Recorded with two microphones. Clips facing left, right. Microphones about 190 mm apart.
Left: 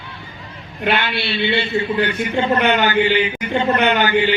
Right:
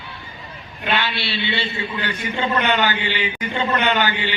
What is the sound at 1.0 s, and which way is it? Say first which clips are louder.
Speech: left 4 dB; 55° left (ahead or behind).